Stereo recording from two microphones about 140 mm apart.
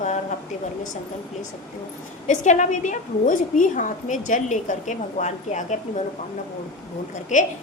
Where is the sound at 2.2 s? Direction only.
60° left (ahead or behind).